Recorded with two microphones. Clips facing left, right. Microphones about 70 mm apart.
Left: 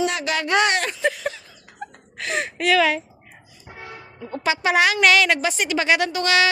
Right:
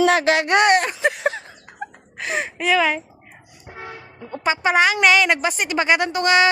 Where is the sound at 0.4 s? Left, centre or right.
Right.